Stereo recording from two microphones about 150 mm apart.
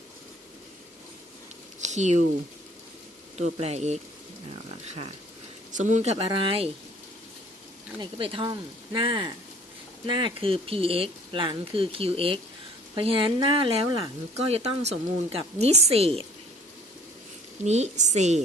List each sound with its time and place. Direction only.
1.8 s speech: 50° right (ahead or behind)
3.3 s a woman's voice: 45° right (ahead or behind)
5.7 s a woman's voice: 55° right (ahead or behind)
6.2 s speech: 35° right (ahead or behind)
7.9 s speech: 35° right (ahead or behind)
17.6 s a woman's voice: 50° right (ahead or behind)